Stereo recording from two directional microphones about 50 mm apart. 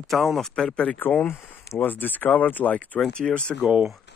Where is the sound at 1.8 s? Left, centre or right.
Left.